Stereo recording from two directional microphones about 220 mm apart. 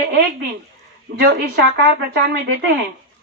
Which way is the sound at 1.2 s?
45° right (ahead or behind).